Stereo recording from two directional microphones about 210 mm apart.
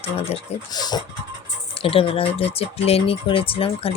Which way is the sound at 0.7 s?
20° left (ahead or behind).